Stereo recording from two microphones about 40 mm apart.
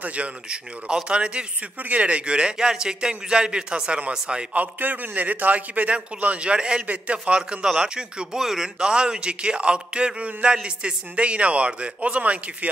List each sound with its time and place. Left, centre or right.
0.0 s a man's voice: right
0.8 s a man's voice: right
4.6 s a man's voice: right
8.4 s speech: centre
8.7 s a man's voice: right